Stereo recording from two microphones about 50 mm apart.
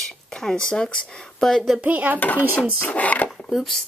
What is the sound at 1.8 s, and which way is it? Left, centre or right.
Speech, right.